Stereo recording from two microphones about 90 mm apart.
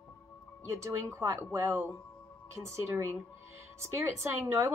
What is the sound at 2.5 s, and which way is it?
Speech, 30° right (ahead or behind).